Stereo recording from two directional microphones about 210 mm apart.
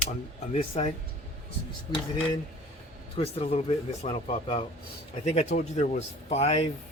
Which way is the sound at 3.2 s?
30° left (ahead or behind).